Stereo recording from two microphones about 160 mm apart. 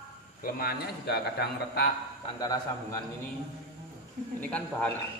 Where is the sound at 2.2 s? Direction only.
25° left (ahead or behind).